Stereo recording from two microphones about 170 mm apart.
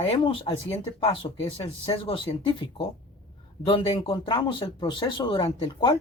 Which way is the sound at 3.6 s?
30° left (ahead or behind).